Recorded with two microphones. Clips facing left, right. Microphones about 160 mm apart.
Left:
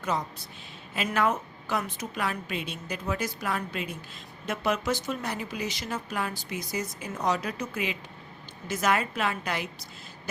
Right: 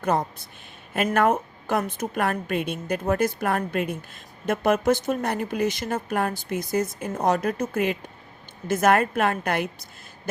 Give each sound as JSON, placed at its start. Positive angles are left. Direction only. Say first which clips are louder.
{"t": 0.0, "sound": "speech", "louder": "right 6 dB", "side_deg": -55}